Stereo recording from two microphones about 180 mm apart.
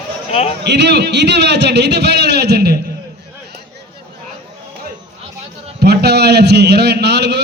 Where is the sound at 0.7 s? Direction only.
70° right (ahead or behind).